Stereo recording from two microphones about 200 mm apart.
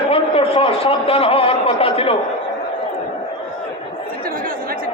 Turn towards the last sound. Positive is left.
turn(degrees=-45)  # may be behind; listen again after turning